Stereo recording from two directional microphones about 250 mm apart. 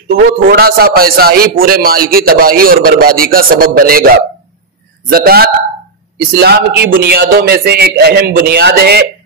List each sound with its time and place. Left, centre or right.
0.2 s a man's voice: right
5.1 s a man's voice: right